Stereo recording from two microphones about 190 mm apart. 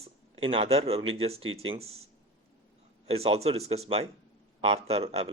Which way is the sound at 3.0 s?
30° right (ahead or behind).